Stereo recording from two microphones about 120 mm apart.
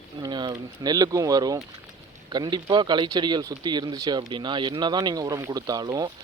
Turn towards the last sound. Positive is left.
turn(degrees=-35)  # may be behind; listen again after turning